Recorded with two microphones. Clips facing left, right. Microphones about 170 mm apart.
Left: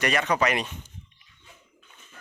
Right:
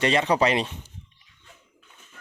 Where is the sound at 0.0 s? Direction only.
25° right (ahead or behind).